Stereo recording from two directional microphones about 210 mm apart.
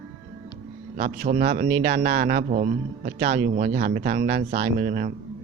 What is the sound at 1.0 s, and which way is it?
Speech, 35° right (ahead or behind).